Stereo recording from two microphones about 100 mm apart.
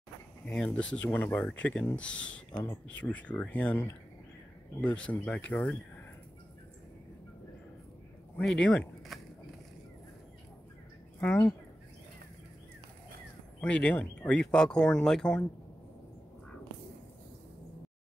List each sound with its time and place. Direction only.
0.7 s speech: 10° left (ahead or behind)
4.8 s speech: 15° left (ahead or behind)
8.4 s speech: 10° left (ahead or behind)
11.1 s speech: 15° left (ahead or behind)
13.6 s speech: 10° left (ahead or behind)